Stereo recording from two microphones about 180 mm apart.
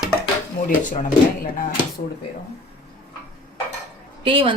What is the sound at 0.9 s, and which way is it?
Speech, 45° left (ahead or behind).